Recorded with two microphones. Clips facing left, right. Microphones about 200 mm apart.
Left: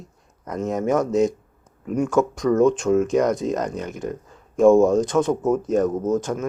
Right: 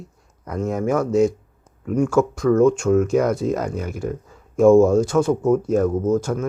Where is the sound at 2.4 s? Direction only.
Centre (ahead or behind).